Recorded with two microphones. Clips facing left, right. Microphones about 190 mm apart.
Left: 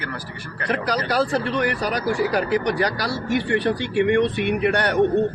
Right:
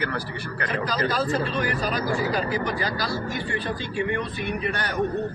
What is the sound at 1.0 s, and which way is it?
Speech, 75° left (ahead or behind).